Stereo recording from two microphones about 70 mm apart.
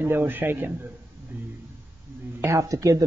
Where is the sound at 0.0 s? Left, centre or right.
Right.